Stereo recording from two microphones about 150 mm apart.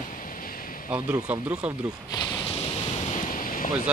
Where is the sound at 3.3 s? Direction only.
65° left (ahead or behind).